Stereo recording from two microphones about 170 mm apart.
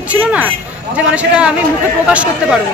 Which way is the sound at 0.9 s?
5° right (ahead or behind).